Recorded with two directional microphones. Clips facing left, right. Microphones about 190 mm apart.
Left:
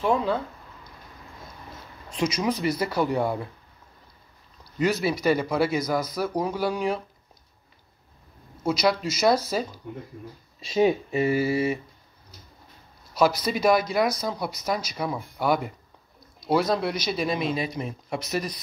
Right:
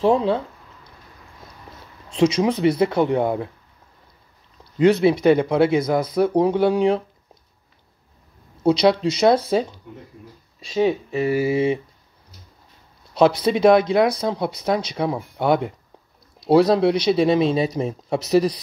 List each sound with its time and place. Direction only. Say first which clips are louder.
0.0 s speech: right 6 dB; 30° right (ahead or behind)
2.0 s speech: right 7 dB; 30° right (ahead or behind)
4.8 s speech: right 8 dB; 25° right (ahead or behind)
8.6 s speech: right 7 dB; 30° right (ahead or behind)
10.6 s speech: right 1 dB; 5° left (ahead or behind)
11.3 s speech: right 4 dB; 20° right (ahead or behind)
13.1 s speech: right 6 dB; 25° right (ahead or behind)